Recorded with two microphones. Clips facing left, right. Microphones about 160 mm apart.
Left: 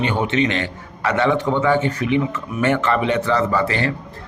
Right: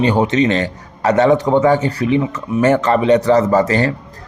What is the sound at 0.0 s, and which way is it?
Speech, 35° right (ahead or behind).